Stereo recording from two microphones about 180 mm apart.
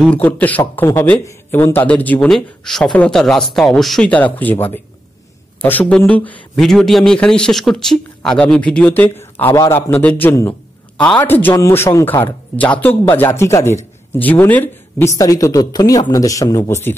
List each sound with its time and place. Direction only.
0.0 s speech: 10° left (ahead or behind)